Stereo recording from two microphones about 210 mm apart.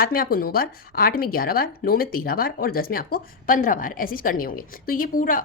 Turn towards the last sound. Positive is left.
turn(degrees=40)  # may be behind; listen again after turning